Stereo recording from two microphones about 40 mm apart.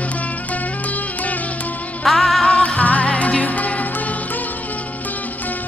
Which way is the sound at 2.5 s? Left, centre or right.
Left.